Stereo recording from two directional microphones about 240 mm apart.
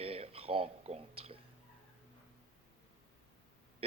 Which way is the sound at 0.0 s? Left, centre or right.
Right.